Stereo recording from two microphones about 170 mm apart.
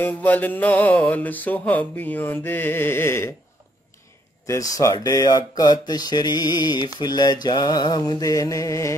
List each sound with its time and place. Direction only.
0.0 s mantra: 10° left (ahead or behind)
4.5 s mantra: 20° left (ahead or behind)